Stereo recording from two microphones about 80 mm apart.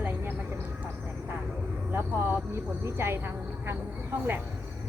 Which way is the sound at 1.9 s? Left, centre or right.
Right.